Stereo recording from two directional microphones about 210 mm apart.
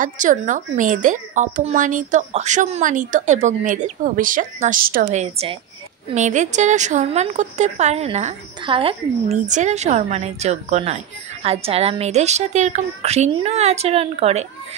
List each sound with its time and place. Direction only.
0.0 s speech: 40° right (ahead or behind)